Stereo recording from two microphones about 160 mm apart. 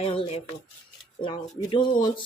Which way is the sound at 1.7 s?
30° left (ahead or behind).